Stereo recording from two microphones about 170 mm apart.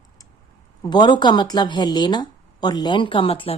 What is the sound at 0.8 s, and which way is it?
Speech, 25° left (ahead or behind).